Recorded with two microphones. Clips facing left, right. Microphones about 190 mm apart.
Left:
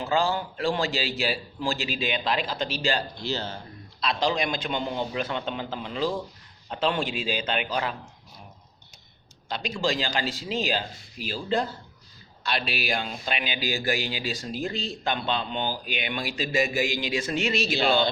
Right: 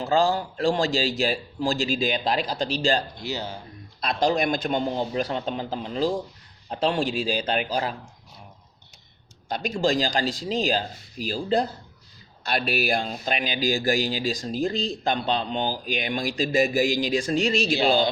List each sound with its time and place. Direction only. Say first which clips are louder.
0.0 s speech: right 3 dB; 40° right (ahead or behind)
3.2 s speech: even; 15° right (ahead or behind)
4.0 s speech: right 3 dB; 45° right (ahead or behind)
9.5 s speech: right 4 dB; 45° right (ahead or behind)
12.4 s speech: right 4 dB; 50° right (ahead or behind)
12.9 s speech: right 4 dB; 35° right (ahead or behind)